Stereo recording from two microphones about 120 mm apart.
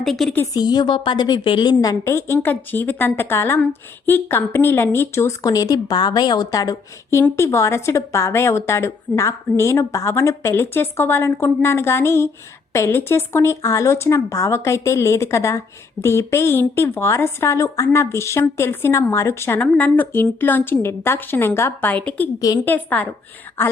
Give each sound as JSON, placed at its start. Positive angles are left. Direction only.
{"t": 0.0, "sound": "a woman's voice", "side_deg": 5}
{"t": 0.5, "sound": "a woman's voice", "side_deg": 35}